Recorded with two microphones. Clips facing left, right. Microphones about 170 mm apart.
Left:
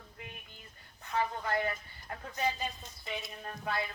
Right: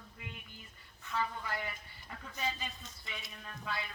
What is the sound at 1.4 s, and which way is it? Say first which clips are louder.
Speech: left 8 dB; 55° left (ahead or behind).